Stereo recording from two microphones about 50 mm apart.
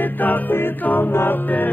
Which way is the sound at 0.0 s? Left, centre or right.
Left.